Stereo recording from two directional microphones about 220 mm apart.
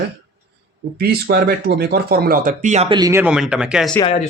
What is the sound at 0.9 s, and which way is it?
Speech, 45° right (ahead or behind).